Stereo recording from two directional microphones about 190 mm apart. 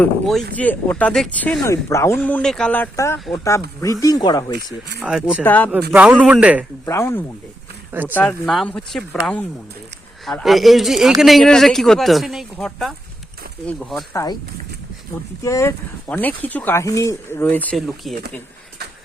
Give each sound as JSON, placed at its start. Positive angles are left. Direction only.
{"t": 0.0, "sound": "speech", "side_deg": 0}
{"t": 4.9, "sound": "speech", "side_deg": -5}
{"t": 5.4, "sound": "speech", "side_deg": 10}
{"t": 5.9, "sound": "a man's voice", "side_deg": -10}
{"t": 6.8, "sound": "speech", "side_deg": 15}
{"t": 15.4, "sound": "speech", "side_deg": 15}